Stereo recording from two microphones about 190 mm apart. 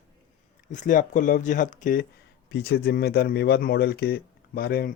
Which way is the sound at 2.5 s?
55° left (ahead or behind).